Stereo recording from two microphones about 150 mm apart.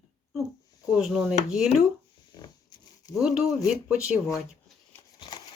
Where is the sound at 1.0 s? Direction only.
5° right (ahead or behind).